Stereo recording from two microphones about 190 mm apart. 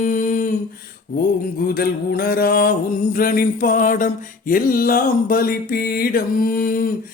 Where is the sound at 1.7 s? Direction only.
50° left (ahead or behind).